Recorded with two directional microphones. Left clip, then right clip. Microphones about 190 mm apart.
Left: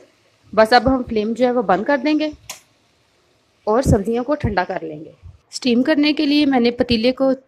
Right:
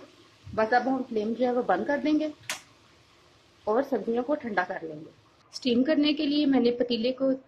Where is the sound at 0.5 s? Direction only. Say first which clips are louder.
Left 11 dB; 40° left (ahead or behind).